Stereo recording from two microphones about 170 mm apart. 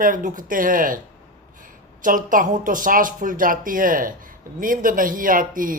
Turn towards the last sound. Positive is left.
turn(degrees=-55)  # may be behind; listen again after turning